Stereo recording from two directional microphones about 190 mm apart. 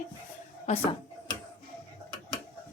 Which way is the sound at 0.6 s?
30° left (ahead or behind).